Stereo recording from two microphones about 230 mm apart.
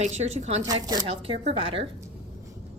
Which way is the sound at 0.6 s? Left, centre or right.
Centre.